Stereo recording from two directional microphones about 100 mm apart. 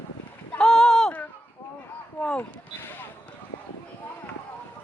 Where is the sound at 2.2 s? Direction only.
10° left (ahead or behind).